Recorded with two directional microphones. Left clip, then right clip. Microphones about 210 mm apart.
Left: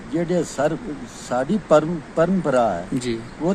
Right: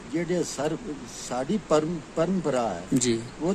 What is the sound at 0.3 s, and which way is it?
Speech, centre (ahead or behind).